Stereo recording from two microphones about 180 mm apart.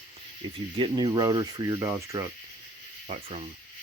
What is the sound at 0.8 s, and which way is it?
Speech, 25° right (ahead or behind).